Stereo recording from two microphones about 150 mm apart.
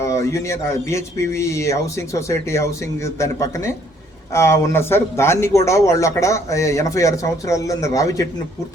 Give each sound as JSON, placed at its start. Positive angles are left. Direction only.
{"t": 0.0, "sound": "speech", "side_deg": 20}